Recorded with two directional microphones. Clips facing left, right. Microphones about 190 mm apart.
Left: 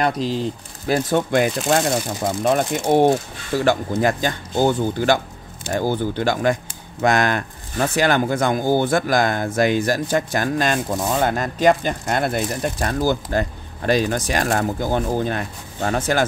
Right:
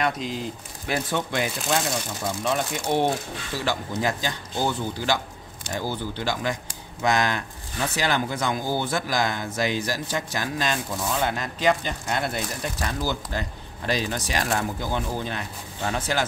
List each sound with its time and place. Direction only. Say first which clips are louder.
0.0 s speech: left 6 dB; 35° left (ahead or behind); by 16.3 s 50° left (ahead or behind)